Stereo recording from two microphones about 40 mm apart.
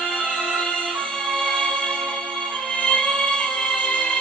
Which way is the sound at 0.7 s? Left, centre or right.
Left.